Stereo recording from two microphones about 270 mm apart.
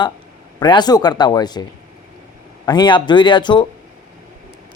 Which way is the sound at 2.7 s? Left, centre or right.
Centre.